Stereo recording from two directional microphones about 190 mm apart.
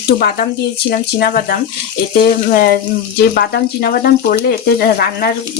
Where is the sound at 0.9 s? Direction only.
50° left (ahead or behind).